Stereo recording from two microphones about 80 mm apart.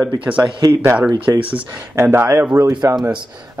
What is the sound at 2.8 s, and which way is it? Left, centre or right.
Speech, right.